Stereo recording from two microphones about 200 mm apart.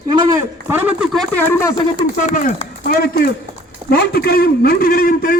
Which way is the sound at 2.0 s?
40° left (ahead or behind).